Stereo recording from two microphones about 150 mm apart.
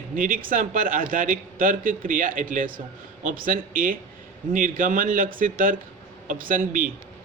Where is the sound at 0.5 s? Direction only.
65° right (ahead or behind).